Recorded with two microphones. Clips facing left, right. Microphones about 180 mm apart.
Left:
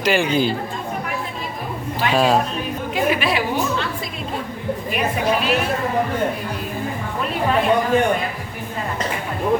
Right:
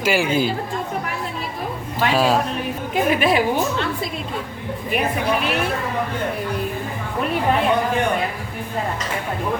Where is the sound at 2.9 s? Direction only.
45° right (ahead or behind).